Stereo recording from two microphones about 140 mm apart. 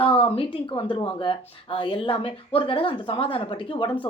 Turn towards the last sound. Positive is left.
turn(degrees=40)  # may be behind; listen again after turning